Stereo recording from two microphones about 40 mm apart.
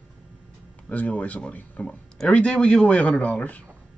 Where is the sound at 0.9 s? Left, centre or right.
Left.